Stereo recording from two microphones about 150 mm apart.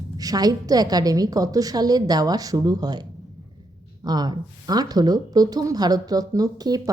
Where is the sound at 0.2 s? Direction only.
25° right (ahead or behind).